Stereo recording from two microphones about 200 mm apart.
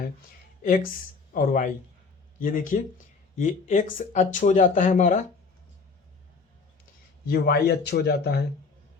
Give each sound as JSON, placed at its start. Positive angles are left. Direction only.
{"t": 1.3, "sound": "speech", "side_deg": 45}
{"t": 7.3, "sound": "speech", "side_deg": 50}